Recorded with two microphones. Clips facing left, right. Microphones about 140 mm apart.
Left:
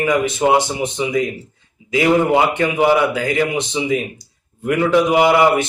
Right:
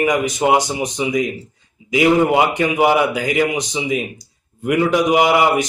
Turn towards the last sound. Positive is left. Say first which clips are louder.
# left 1 dB
turn(degrees=-15)  # may be behind; listen again after turning